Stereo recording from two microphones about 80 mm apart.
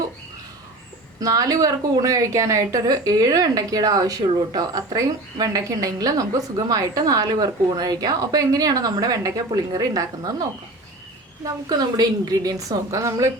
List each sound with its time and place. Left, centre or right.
1.2 s a woman's voice: right
11.4 s a woman's voice: right